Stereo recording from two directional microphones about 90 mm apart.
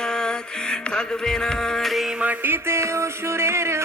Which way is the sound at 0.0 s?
10° left (ahead or behind).